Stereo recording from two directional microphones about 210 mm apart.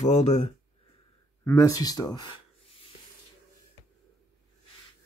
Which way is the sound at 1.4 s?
15° left (ahead or behind).